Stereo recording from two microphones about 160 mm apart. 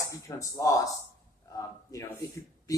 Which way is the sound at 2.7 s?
20° left (ahead or behind).